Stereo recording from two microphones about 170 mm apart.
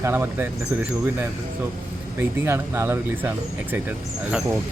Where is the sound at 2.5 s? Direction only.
15° right (ahead or behind).